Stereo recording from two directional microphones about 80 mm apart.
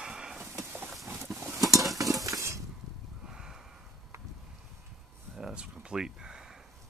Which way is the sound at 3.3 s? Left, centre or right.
Centre.